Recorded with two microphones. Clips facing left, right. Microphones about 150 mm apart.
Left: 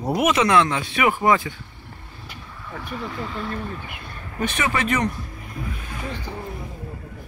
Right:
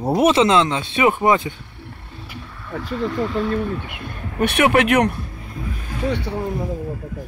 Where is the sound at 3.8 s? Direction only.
65° right (ahead or behind).